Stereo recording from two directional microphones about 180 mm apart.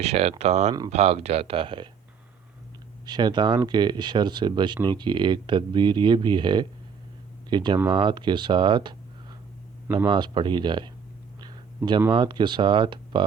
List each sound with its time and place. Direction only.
0.0 s speech: 35° right (ahead or behind)
3.1 s speech: 25° right (ahead or behind)
10.1 s speech: 25° right (ahead or behind)
11.3 s a sound: 20° right (ahead or behind)
12.1 s speech: 25° right (ahead or behind)